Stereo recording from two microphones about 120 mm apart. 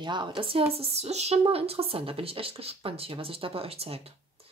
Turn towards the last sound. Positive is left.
turn(degrees=-55)  # may be behind; listen again after turning